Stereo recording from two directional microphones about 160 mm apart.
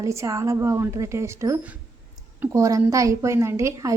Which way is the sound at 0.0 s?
20° right (ahead or behind).